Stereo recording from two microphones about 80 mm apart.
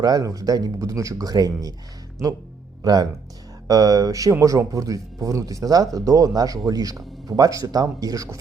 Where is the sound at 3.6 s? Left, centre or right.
Right.